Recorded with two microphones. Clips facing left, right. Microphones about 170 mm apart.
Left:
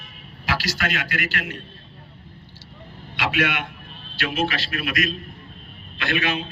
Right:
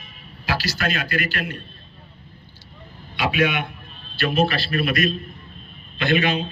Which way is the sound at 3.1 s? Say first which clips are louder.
Right 3 dB; 90° left.